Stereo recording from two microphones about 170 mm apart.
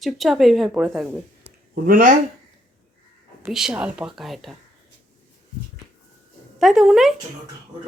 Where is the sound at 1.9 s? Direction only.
55° right (ahead or behind).